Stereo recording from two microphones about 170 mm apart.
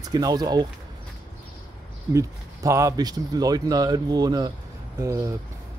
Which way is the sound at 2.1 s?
20° right (ahead or behind).